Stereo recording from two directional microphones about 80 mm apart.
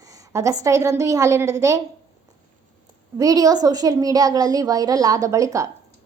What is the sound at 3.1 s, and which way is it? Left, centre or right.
A woman's voice, right.